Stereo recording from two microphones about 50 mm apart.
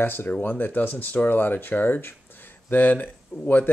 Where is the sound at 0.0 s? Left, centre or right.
Left.